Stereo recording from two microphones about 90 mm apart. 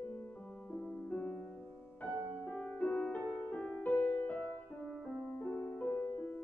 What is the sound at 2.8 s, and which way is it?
Music, 15° left (ahead or behind).